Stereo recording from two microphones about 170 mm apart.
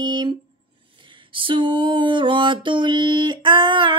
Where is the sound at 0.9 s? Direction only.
30° right (ahead or behind).